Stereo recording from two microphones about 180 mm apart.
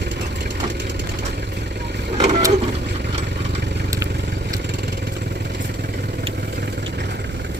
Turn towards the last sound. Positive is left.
turn(degrees=-70)  # may be behind; listen again after turning